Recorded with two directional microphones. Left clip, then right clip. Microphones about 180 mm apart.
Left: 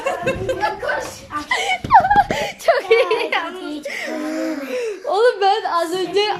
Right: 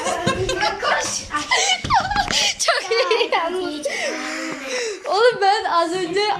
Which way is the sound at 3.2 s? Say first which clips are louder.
Right 1 dB; 25° right (ahead or behind).